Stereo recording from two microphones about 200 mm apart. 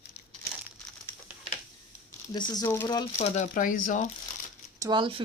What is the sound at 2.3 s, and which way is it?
Speech, 20° left (ahead or behind).